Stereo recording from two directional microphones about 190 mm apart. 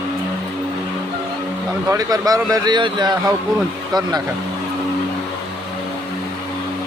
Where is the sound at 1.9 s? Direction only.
20° right (ahead or behind).